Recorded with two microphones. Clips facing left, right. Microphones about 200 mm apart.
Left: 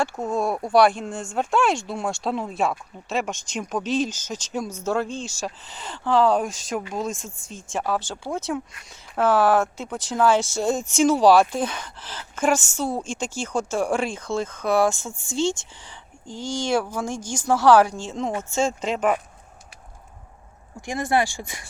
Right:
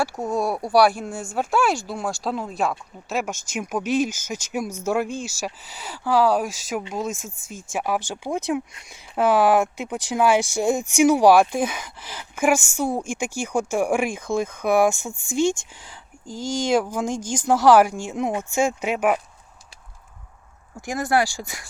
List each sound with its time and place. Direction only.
0.0 s speech: 10° right (ahead or behind)
20.8 s speech: 5° right (ahead or behind)